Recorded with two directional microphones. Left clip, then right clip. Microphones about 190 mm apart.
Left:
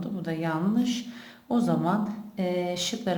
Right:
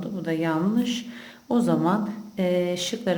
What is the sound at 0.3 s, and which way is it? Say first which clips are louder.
Speech: right 4 dB; 10° right (ahead or behind).